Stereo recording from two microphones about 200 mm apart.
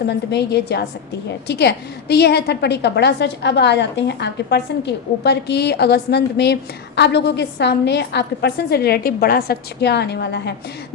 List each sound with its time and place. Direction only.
0.0 s a woman's voice: 55° left (ahead or behind)